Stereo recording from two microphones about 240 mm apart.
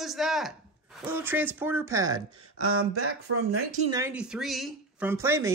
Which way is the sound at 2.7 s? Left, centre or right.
Right.